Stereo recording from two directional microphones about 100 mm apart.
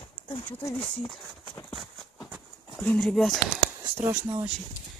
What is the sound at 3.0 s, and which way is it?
Speech, centre (ahead or behind).